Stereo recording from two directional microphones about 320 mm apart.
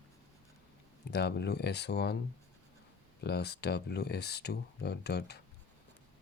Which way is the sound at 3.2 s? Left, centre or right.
Left.